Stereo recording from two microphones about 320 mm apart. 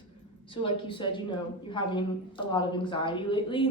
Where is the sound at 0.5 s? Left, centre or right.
Centre.